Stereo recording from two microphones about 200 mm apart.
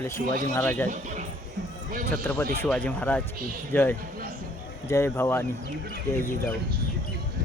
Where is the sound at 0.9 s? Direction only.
35° right (ahead or behind).